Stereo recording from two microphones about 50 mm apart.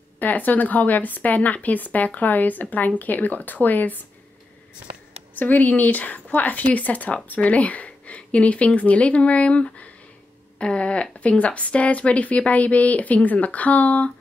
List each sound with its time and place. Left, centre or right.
0.2 s speech: left
5.3 s speech: left